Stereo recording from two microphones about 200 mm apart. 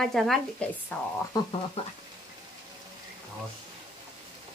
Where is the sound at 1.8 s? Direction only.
30° left (ahead or behind).